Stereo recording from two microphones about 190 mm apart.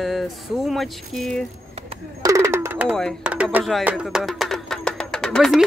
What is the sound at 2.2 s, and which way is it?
Music, 15° right (ahead or behind).